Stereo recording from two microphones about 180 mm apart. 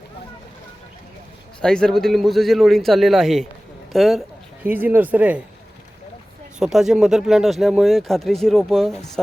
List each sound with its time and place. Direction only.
1.6 s speech: 5° left (ahead or behind)
4.6 s speech: 10° right (ahead or behind)
6.6 s speech: centre (ahead or behind)